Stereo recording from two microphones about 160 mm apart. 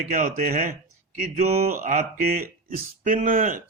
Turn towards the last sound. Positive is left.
turn(degrees=-60)  # may be behind; listen again after turning